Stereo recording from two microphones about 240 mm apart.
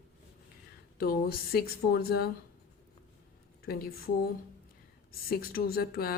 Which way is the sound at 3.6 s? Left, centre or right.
Left.